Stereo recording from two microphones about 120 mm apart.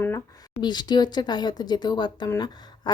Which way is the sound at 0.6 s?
40° left (ahead or behind).